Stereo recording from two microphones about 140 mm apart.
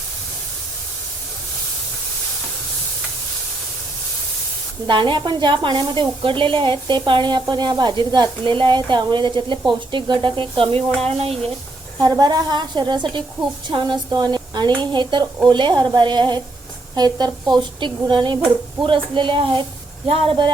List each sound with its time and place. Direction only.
4.9 s speech: 35° right (ahead or behind)
10.8 s speech: 5° left (ahead or behind)
11.2 s speech: 45° right (ahead or behind)
11.9 s a woman's voice: 25° right (ahead or behind)